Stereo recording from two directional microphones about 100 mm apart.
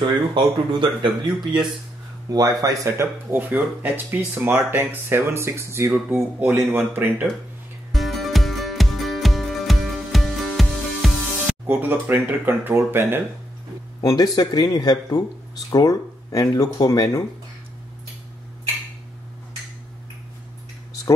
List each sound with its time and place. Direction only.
0.3 s speech: 50° right (ahead or behind)
2.3 s speech: 40° right (ahead or behind)
3.3 s speech: 15° right (ahead or behind)
7.9 s music: centre (ahead or behind)
11.6 s speech: 20° right (ahead or behind)
14.0 s speech: 40° left (ahead or behind)